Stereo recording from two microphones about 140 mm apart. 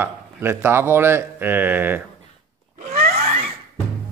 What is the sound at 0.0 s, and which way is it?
Speech, 15° right (ahead or behind).